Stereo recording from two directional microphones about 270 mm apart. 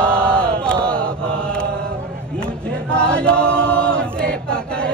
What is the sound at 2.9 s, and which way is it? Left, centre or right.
Chant, centre.